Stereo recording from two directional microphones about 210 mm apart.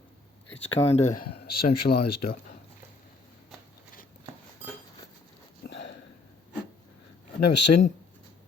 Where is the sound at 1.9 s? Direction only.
45° left (ahead or behind).